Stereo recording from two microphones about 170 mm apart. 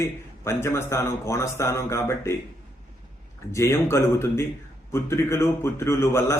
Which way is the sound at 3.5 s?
15° left (ahead or behind).